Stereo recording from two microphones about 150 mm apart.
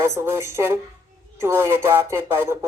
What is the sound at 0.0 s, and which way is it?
Speech, 20° right (ahead or behind).